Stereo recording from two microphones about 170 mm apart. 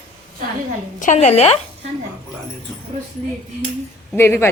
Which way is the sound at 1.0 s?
45° left (ahead or behind).